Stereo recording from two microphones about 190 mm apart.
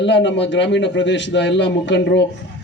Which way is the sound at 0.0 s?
70° left (ahead or behind).